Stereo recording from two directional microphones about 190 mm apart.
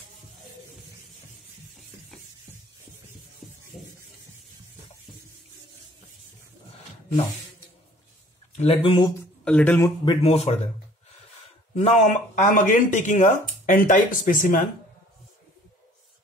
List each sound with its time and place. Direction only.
8.5 s speech: 30° left (ahead or behind)
9.4 s speech: 5° left (ahead or behind)
9.8 s speech: 30° left (ahead or behind)
11.7 s speech: 35° left (ahead or behind)